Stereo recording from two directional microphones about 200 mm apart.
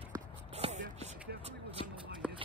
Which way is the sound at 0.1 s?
30° right (ahead or behind).